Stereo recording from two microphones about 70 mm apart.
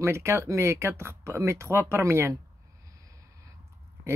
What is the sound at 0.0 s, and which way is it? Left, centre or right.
Speech, right.